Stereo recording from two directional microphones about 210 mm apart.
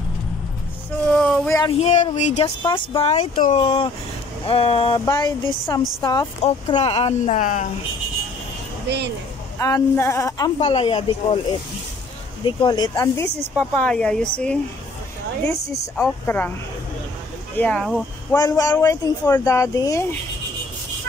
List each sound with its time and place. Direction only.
1.1 s a sound: 5° left (ahead or behind)
1.6 s speech: 30° left (ahead or behind)
8.8 s speech: 50° right (ahead or behind)
9.6 s speech: 15° left (ahead or behind)
10.6 s speech: 25° left (ahead or behind)
12.4 s speech: 20° left (ahead or behind)
16.0 s speech: 10° left (ahead or behind)
17.6 s speech: 5° left (ahead or behind)
18.3 s speech: 15° left (ahead or behind)